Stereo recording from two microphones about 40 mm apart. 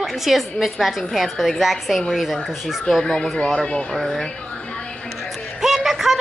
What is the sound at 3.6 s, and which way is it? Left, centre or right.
Speech, left.